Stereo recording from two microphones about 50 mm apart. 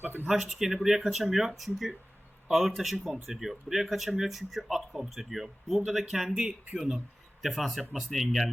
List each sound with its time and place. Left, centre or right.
0.0 s a sound: right
0.3 s speech: centre
7.4 s speech: centre